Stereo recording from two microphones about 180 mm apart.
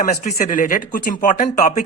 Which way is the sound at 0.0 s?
45° left (ahead or behind).